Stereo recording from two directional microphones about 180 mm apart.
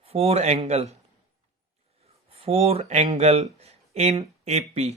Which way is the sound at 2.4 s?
35° right (ahead or behind).